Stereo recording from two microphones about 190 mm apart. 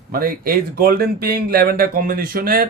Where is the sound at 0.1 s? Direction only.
50° right (ahead or behind).